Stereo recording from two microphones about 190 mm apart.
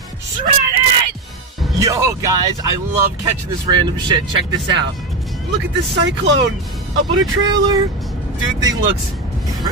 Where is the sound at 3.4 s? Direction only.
25° right (ahead or behind).